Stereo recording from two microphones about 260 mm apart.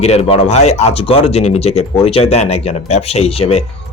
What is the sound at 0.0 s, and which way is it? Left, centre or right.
Speech, left.